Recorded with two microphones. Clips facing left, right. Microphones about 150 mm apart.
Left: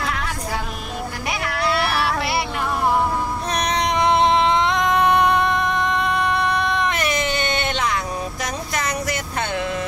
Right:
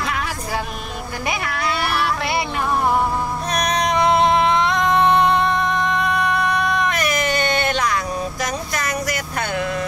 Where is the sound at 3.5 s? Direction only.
25° left (ahead or behind).